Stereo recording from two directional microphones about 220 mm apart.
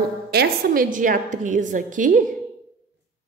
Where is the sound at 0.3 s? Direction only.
40° right (ahead or behind).